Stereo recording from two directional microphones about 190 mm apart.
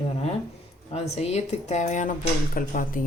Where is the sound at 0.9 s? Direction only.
35° left (ahead or behind).